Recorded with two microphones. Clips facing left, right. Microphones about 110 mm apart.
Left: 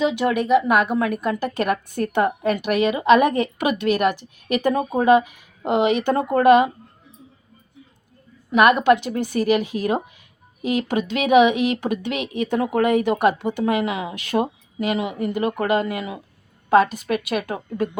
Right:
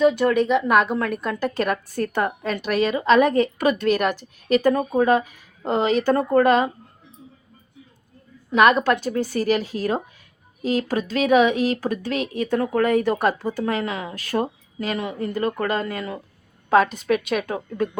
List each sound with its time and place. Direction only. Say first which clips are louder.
0.2 s speech: left 1 dB; 10° left (ahead or behind)
8.4 s a woman's voice: left 2 dB; 5° left (ahead or behind)